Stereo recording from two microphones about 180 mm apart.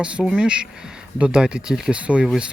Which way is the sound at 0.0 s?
5° right (ahead or behind).